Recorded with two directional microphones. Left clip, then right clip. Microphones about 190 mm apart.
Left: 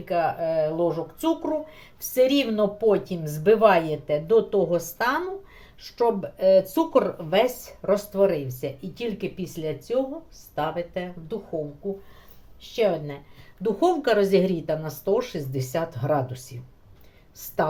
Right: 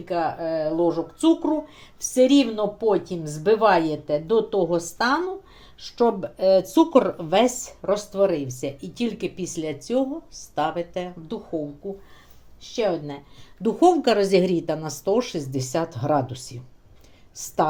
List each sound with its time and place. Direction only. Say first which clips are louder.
0.0 s speech: left 1 dB; 20° right (ahead or behind)
6.0 s speech: right 1 dB; 40° right (ahead or behind)
12.7 s speech: left 1 dB; 30° right (ahead or behind)